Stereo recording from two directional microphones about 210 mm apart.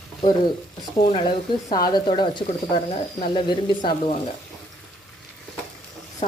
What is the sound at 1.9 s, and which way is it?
Speech, 20° left (ahead or behind).